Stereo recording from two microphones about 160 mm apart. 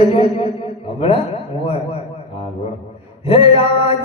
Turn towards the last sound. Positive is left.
turn(degrees=40)  # may be behind; listen again after turning